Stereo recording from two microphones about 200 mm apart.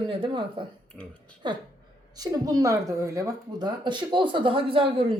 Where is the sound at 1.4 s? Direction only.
25° right (ahead or behind).